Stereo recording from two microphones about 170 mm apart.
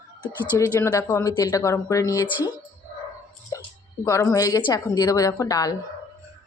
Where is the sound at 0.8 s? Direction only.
15° left (ahead or behind).